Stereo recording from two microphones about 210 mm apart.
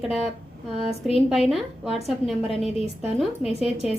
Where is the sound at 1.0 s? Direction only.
Centre (ahead or behind).